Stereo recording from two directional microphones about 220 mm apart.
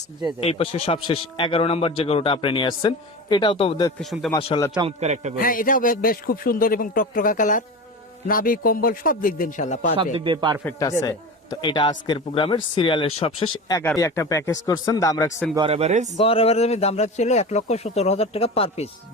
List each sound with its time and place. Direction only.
0.3 s speech: 25° left (ahead or behind)
4.0 s a man's voice: centre (ahead or behind)
4.4 s speech: 20° left (ahead or behind)
4.8 s a man's voice: 30° right (ahead or behind)
5.4 s a man's voice: 40° left (ahead or behind)
9.9 s a man's voice: 25° right (ahead or behind)
10.6 s speech: 10° left (ahead or behind)
15.5 s a man's voice: 25° right (ahead or behind)
16.1 s speech: 25° left (ahead or behind)